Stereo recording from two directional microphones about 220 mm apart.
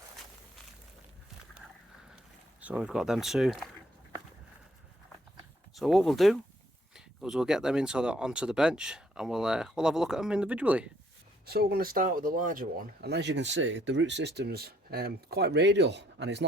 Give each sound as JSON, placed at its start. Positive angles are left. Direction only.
{"t": 2.6, "sound": "speech", "side_deg": -5}
{"t": 5.7, "sound": "speech", "side_deg": 0}
{"t": 11.4, "sound": "speech", "side_deg": -45}